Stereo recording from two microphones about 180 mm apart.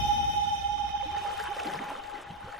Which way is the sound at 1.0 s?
Centre (ahead or behind).